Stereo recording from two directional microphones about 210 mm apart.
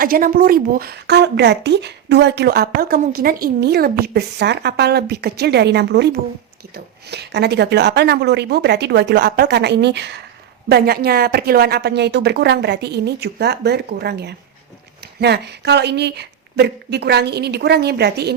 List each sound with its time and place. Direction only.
0.0 s speech: 40° right (ahead or behind)